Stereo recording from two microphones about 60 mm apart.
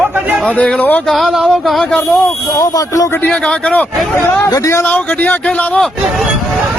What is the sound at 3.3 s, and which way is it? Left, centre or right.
Speech, centre.